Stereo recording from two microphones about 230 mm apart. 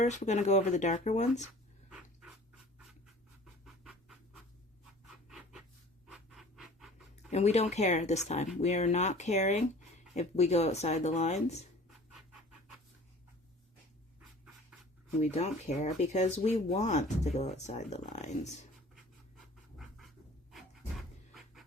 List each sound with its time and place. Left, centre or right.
0.0 s speech: left
3.4 s scratch: centre
5.0 s a sound: centre
6.1 s scratch: centre
7.3 s speech: left
15.2 s speech: left